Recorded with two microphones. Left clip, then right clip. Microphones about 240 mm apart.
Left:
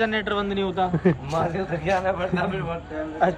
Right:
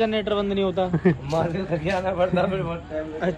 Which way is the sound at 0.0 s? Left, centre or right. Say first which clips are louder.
Right 1 dB; centre.